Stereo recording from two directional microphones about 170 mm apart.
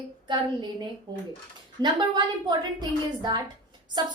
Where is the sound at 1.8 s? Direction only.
25° right (ahead or behind).